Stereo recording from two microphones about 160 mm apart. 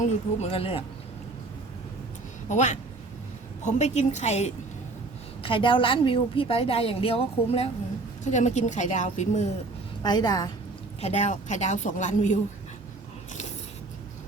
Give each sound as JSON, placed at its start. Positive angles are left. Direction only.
{"t": 0.0, "sound": "a woman's voice", "side_deg": 40}
{"t": 2.5, "sound": "a woman's voice", "side_deg": 50}
{"t": 5.4, "sound": "a woman's voice", "side_deg": 35}
{"t": 8.2, "sound": "a woman's voice", "side_deg": 50}
{"t": 10.0, "sound": "a woman's voice", "side_deg": 25}
{"t": 11.0, "sound": "a woman's voice", "side_deg": 45}